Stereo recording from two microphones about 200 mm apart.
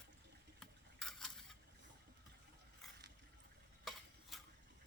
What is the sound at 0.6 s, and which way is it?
Stir, centre (ahead or behind).